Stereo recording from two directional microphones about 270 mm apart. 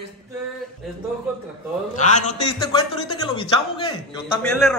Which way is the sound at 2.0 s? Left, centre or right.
Left.